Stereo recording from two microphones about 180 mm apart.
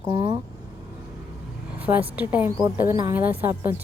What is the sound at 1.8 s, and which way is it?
A woman's voice, 10° right (ahead or behind).